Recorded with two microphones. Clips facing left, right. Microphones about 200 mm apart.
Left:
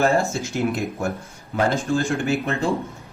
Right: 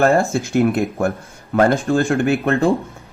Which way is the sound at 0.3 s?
60° right (ahead or behind).